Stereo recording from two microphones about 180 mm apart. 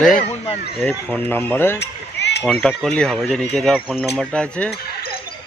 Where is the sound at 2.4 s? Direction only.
5° left (ahead or behind).